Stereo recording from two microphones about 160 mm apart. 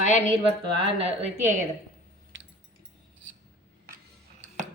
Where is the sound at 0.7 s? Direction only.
40° right (ahead or behind).